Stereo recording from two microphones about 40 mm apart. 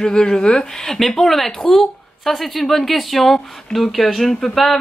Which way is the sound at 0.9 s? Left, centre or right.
Centre.